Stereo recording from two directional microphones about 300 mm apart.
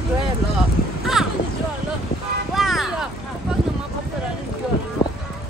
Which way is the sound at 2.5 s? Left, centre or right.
Centre.